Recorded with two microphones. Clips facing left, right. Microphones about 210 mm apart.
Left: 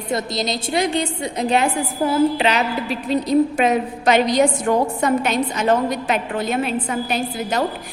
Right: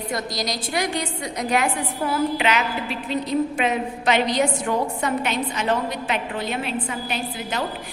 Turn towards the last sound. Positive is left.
turn(degrees=40)  # may be behind; listen again after turning